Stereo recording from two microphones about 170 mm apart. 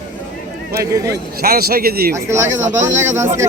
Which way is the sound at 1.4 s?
60° right (ahead or behind).